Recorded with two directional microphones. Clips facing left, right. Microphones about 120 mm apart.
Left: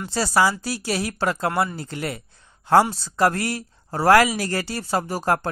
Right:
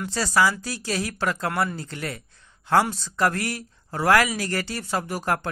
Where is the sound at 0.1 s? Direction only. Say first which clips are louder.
Left 2 dB; 30° left (ahead or behind).